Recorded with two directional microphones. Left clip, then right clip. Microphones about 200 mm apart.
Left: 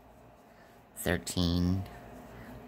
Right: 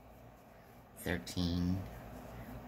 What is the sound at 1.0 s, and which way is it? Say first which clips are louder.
Speech: left 7 dB; 55° left (ahead or behind).